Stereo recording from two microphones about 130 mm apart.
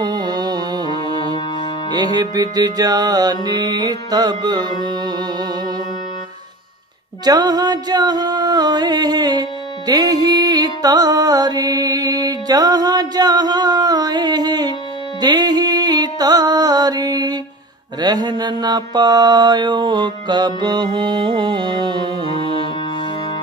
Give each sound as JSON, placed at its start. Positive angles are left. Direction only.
{"t": 0.0, "sound": "music", "side_deg": -30}
{"t": 1.9, "sound": "mantra", "side_deg": -30}
{"t": 7.2, "sound": "music", "side_deg": -30}
{"t": 18.0, "sound": "mantra", "side_deg": -35}